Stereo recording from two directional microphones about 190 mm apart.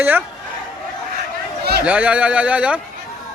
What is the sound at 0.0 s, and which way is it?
Speech, 10° right (ahead or behind).